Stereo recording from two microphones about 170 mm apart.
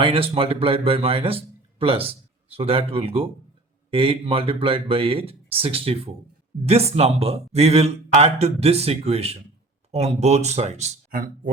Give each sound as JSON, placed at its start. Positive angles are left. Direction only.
{"t": 0.0, "sound": "speech", "side_deg": -35}